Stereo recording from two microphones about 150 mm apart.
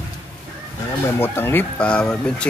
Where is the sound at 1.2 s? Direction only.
15° left (ahead or behind).